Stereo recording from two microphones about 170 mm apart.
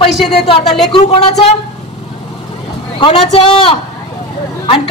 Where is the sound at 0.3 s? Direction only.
35° left (ahead or behind).